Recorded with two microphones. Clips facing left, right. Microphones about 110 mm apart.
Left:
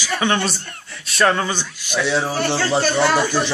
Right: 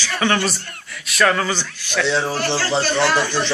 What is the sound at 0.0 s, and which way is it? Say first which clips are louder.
Speech: even; 20° left (ahead or behind).